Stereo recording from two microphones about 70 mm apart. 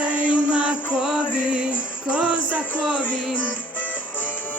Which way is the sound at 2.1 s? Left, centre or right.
Centre.